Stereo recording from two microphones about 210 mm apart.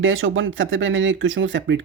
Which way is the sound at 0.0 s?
70° right (ahead or behind).